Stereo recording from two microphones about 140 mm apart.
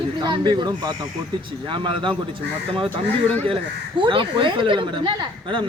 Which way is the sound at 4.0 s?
35° right (ahead or behind).